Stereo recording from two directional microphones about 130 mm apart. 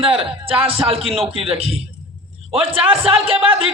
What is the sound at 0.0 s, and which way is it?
A man's voice, 45° right (ahead or behind).